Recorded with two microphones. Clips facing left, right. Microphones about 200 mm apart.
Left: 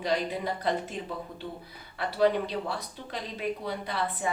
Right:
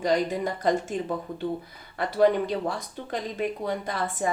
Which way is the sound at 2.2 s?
50° right (ahead or behind).